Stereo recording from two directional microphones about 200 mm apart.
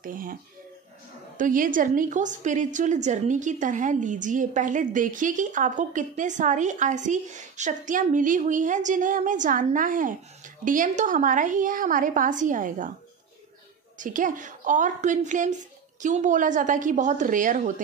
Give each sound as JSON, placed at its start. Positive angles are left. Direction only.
{"t": 0.0, "sound": "speech", "side_deg": -45}
{"t": 1.4, "sound": "a woman's voice", "side_deg": -40}
{"t": 13.9, "sound": "a woman's voice", "side_deg": -40}